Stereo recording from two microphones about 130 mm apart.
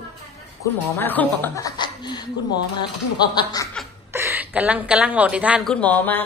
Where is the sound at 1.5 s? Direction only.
30° left (ahead or behind).